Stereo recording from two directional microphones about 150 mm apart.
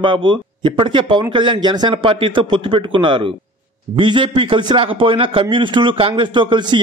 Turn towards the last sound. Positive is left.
turn(degrees=-30)  # may be behind; listen again after turning